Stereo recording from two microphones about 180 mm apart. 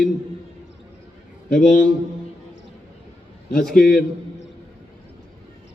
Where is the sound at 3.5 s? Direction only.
Centre (ahead or behind).